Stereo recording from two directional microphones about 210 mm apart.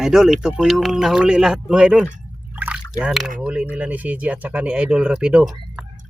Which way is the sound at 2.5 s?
10° right (ahead or behind).